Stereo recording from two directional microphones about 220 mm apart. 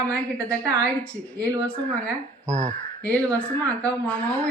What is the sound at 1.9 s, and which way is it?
Speech, 5° left (ahead or behind).